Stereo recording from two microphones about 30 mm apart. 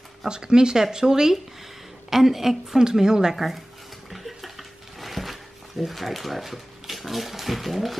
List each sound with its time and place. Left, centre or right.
0.3 s speech: right
2.0 s a woman's voice: centre
2.8 s speech: right
3.3 s speech: centre
4.1 s a sound: centre
5.9 s speech: centre